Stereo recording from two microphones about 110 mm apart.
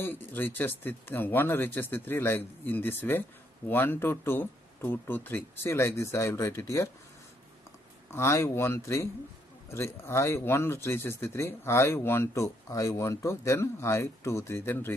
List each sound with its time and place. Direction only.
0.0 s speech: 20° left (ahead or behind)
8.1 s speech: 25° left (ahead or behind)